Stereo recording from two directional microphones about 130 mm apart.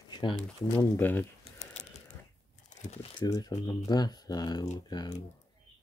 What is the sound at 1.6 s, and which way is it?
Typing, 60° left (ahead or behind).